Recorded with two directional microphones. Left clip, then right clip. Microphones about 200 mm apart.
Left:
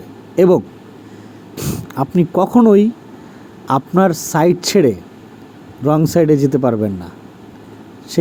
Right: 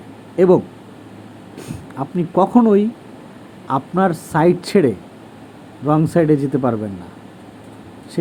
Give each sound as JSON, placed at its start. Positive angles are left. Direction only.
{"t": 0.3, "sound": "a man's voice", "side_deg": 35}